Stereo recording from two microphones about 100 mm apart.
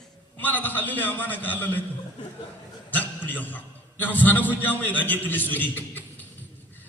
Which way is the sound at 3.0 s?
15° left (ahead or behind).